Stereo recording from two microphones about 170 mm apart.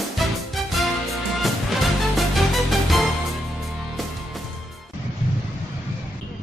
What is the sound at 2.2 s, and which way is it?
Music, centre (ahead or behind).